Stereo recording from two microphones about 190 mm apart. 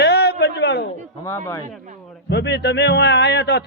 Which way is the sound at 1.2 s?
15° left (ahead or behind).